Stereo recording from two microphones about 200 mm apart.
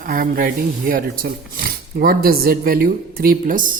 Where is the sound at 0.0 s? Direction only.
45° right (ahead or behind).